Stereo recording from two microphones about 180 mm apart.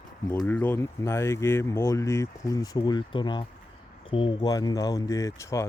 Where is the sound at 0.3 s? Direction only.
15° left (ahead or behind).